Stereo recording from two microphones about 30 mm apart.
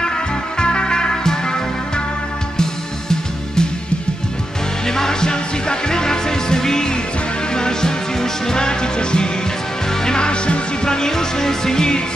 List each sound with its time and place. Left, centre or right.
0.0 s music: left
4.8 s music: centre